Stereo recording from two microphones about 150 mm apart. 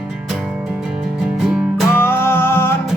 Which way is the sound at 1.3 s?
Centre (ahead or behind).